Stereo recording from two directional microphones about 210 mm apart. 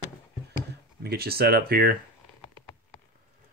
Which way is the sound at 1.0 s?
45° right (ahead or behind).